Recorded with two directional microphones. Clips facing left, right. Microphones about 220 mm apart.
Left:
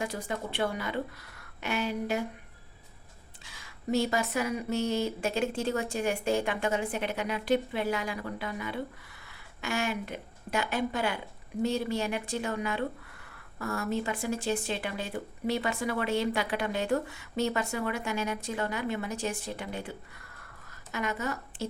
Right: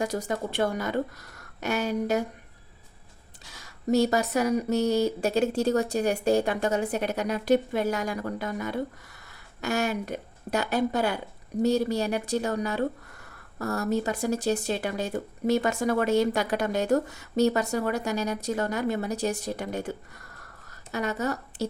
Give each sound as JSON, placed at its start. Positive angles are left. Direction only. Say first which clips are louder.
{"t": 0.0, "sound": "speech", "louder": "right 5 dB", "side_deg": -40}
{"t": 3.4, "sound": "speech", "louder": "right 5 dB", "side_deg": -40}